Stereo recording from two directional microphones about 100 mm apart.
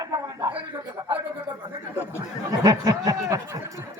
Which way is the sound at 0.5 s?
50° right (ahead or behind).